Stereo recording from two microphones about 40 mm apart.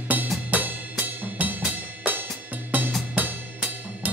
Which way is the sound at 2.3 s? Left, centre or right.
Right.